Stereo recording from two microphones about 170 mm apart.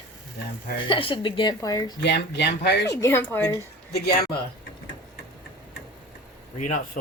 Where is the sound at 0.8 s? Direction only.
30° left (ahead or behind).